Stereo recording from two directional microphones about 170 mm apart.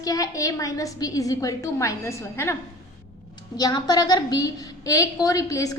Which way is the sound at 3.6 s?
25° left (ahead or behind).